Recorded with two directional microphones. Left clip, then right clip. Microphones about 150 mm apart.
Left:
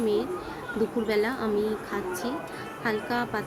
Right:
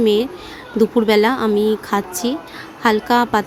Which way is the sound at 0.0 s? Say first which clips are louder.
Right 10 dB; 50° right (ahead or behind).